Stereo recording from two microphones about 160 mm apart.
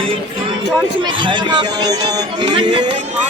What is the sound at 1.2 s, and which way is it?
Speech, 30° right (ahead or behind).